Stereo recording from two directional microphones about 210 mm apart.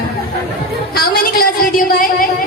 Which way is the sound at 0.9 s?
45° left (ahead or behind).